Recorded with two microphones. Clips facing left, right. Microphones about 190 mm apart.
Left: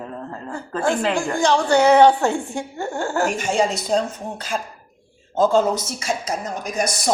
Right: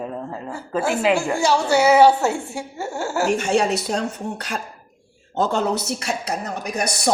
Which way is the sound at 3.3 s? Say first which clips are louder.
Right 1 dB; 65° right (ahead or behind).